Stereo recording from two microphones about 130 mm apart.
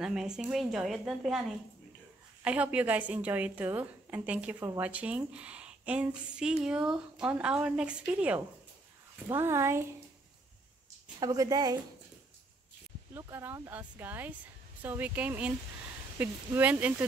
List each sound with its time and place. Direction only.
0.0 s a woman's voice: 5° right (ahead or behind)
2.4 s a woman's voice: 10° right (ahead or behind)
9.3 s a woman's voice: 20° right (ahead or behind)
11.1 s a woman's voice: 30° right (ahead or behind)
13.1 s a woman's voice: 20° right (ahead or behind)